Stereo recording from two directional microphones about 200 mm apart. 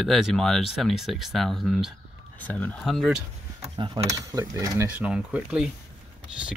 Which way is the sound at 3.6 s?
25° right (ahead or behind).